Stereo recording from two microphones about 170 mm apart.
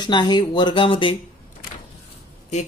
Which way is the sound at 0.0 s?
25° left (ahead or behind).